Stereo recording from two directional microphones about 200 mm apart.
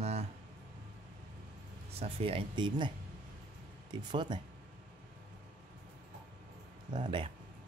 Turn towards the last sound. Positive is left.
turn(degrees=-25)  # may be behind; listen again after turning